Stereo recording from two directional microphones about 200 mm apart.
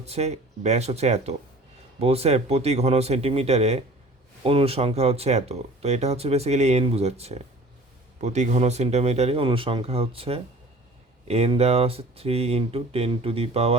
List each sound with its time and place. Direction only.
0.0 s speech: 30° right (ahead or behind)